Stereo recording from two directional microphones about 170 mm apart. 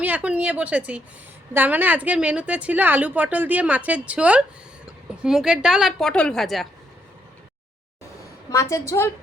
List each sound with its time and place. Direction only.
0.0 s a woman's voice: 10° right (ahead or behind)
8.4 s a woman's voice: 20° left (ahead or behind)